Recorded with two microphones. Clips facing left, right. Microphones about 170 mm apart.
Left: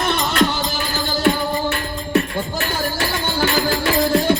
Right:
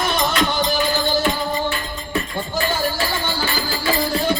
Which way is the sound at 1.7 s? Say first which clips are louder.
Left 6 dB; 70° left (ahead or behind).